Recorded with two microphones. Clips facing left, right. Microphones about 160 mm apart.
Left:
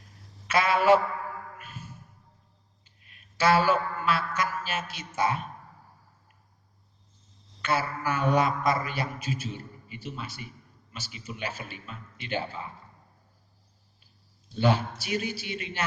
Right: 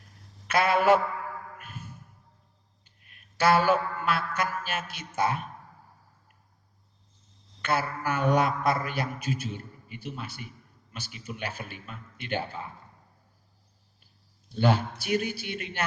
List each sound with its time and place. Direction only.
0.4 s speech: 55° right (ahead or behind)
1.5 s a sound: 55° right (ahead or behind)
4.4 s a man's voice: 55° right (ahead or behind)
7.6 s mantra: 55° right (ahead or behind)
14.9 s mantra: 55° right (ahead or behind)